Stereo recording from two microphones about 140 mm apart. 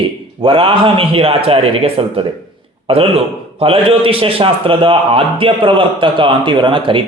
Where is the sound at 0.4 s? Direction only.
40° right (ahead or behind).